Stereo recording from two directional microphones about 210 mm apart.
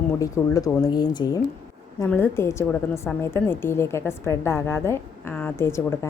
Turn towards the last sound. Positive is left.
turn(degrees=10)  # may be behind; listen again after turning